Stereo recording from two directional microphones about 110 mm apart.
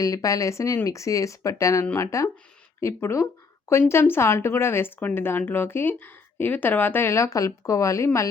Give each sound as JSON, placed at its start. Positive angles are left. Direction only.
{"t": 0.0, "sound": "speech", "side_deg": 30}